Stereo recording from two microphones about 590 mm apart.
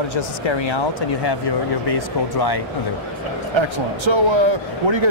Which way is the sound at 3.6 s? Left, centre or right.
Right.